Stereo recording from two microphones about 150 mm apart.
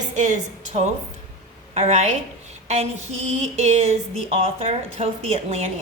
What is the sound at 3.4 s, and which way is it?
A woman's voice, 50° right (ahead or behind).